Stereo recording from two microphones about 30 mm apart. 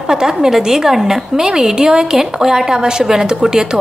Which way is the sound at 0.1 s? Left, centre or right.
Centre.